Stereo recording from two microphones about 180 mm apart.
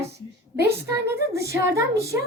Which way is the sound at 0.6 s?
15° right (ahead or behind).